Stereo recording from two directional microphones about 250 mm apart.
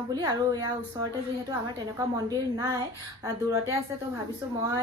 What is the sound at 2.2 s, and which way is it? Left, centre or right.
Speech, centre.